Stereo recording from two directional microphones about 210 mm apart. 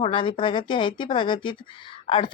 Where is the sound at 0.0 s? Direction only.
25° left (ahead or behind).